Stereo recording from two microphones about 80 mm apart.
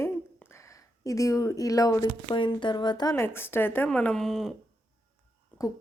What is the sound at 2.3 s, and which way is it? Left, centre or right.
Speech, left.